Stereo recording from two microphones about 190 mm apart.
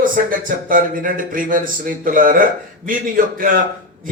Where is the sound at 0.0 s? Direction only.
45° right (ahead or behind).